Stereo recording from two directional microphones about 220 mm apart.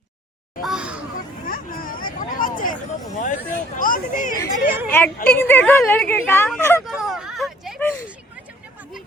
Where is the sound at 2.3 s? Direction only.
40° left (ahead or behind).